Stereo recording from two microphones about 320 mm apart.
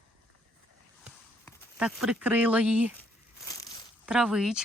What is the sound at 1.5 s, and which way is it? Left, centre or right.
Speech, centre.